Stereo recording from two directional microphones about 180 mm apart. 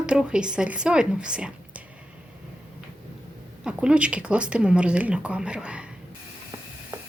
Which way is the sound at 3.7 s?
5° right (ahead or behind).